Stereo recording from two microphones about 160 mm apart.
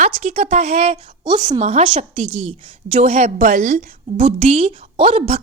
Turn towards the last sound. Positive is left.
turn(degrees=-35)  # may be behind; listen again after turning